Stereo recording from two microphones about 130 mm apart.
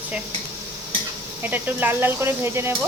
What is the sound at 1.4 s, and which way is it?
Speech, 15° right (ahead or behind).